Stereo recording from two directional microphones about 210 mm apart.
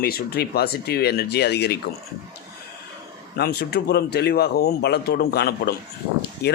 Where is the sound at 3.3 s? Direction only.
50° left (ahead or behind).